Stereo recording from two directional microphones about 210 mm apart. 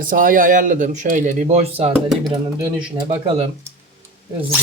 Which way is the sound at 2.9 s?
25° right (ahead or behind).